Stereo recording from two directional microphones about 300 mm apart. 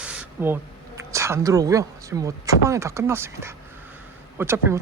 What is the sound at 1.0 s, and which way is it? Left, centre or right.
Speech, centre.